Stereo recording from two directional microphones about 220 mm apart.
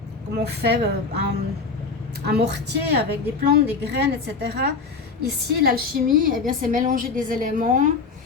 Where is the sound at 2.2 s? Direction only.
50° right (ahead or behind).